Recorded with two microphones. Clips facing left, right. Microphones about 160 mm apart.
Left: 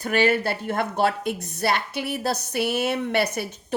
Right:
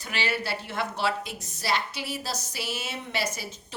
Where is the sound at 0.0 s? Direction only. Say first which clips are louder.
Left 10 dB; 50° left (ahead or behind).